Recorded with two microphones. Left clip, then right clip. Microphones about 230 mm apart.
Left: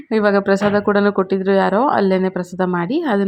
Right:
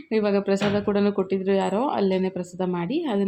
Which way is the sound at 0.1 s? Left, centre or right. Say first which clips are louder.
Left 7 dB; centre.